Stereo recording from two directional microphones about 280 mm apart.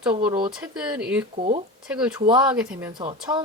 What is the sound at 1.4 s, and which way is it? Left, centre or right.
Speech, right.